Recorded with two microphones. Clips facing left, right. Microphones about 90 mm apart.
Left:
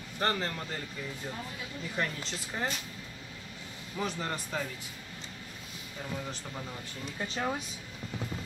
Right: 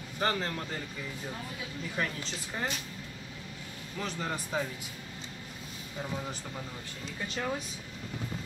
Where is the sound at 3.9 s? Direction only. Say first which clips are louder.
Left 1 dB; centre (ahead or behind).